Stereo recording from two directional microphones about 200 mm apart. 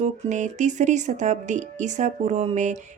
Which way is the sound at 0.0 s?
40° right (ahead or behind).